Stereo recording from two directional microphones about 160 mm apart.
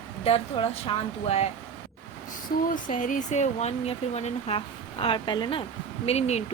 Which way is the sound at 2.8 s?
55° left (ahead or behind).